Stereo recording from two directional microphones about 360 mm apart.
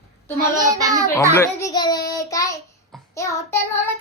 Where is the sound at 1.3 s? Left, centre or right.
Centre.